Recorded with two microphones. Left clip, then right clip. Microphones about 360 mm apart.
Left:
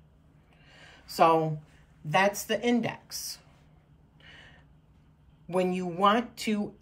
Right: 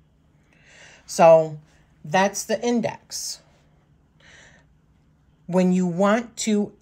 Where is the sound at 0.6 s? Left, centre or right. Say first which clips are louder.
Right 5 dB; centre.